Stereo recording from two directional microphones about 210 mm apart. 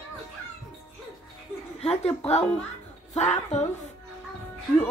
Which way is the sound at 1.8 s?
30° left (ahead or behind).